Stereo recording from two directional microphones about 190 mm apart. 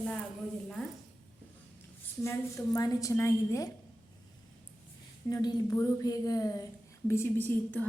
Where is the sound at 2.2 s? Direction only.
15° left (ahead or behind).